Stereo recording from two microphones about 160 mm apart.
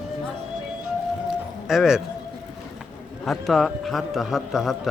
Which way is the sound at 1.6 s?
Centre (ahead or behind).